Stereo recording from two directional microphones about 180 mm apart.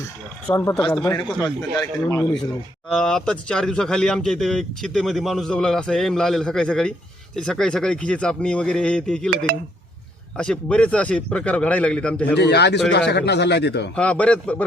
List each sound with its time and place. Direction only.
0.5 s a man's voice: 20° left (ahead or behind)
2.9 s speech: 5° left (ahead or behind)
10.3 s a man's voice: 5° left (ahead or behind)
12.4 s a man's voice: 65° left (ahead or behind)
13.9 s a man's voice: 5° left (ahead or behind)